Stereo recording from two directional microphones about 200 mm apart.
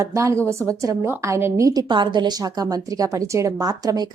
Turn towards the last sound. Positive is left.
turn(degrees=-20)  # may be behind; listen again after turning